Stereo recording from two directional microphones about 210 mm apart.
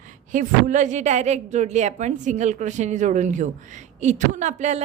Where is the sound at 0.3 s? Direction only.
35° right (ahead or behind).